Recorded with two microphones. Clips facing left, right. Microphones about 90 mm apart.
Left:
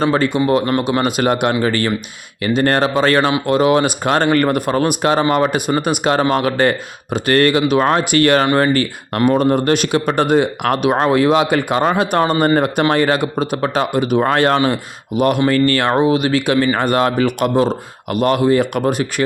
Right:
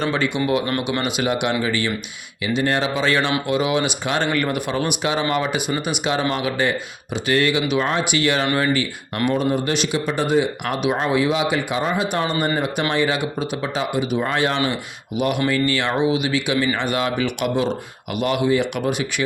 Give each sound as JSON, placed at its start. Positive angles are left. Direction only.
{"t": 0.0, "sound": "speech", "side_deg": 40}
{"t": 12.2, "sound": "speech", "side_deg": 45}